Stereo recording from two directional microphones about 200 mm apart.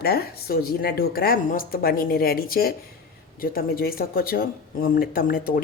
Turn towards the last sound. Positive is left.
turn(degrees=45)  # may be behind; listen again after turning